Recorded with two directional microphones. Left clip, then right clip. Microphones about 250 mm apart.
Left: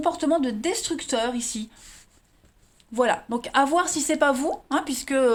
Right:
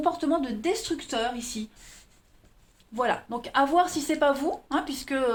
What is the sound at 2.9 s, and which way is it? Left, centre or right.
A woman's voice, left.